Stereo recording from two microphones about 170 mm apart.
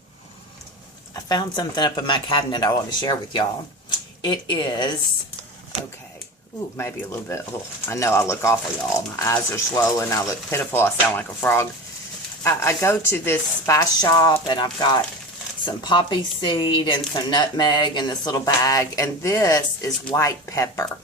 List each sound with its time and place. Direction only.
1.1 s a woman's voice: 25° left (ahead or behind)
6.7 s a woman's voice: 15° left (ahead or behind)